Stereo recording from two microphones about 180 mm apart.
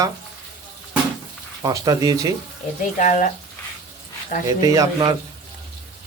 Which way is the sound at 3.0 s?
45° left (ahead or behind).